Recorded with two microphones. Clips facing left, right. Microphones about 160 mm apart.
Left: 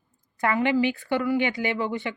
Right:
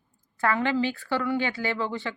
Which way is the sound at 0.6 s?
15° left (ahead or behind).